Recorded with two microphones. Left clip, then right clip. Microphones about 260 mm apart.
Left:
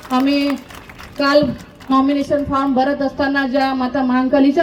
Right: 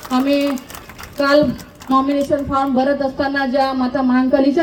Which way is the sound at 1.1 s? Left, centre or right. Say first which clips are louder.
Even; left.